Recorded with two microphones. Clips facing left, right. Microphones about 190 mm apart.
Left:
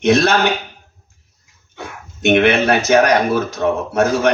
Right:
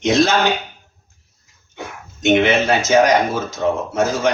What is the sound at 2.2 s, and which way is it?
A man's voice, 65° left (ahead or behind).